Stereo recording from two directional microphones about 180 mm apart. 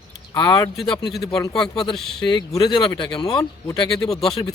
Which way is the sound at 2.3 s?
25° left (ahead or behind).